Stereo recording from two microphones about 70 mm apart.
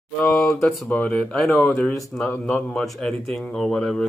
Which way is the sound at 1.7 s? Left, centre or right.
Left.